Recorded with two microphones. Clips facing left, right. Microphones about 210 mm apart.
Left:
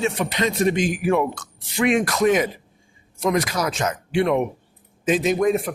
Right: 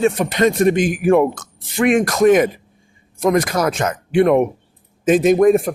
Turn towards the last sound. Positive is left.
turn(degrees=-50)  # may be behind; listen again after turning